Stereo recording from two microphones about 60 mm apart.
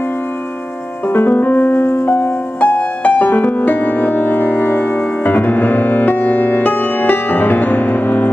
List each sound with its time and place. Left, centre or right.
1.0 s music: left